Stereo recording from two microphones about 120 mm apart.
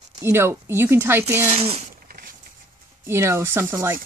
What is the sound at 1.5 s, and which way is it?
Speech, 55° right (ahead or behind).